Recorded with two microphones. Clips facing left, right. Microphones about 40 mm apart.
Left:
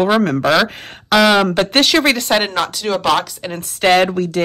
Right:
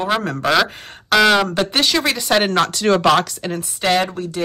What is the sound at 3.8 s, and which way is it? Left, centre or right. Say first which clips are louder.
Speech: left 5 dB; left.